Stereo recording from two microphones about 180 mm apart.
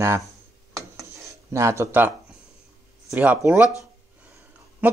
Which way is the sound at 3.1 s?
10° right (ahead or behind).